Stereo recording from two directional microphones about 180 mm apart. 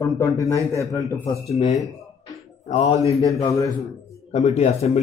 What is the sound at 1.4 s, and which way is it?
A man's voice, 40° left (ahead or behind).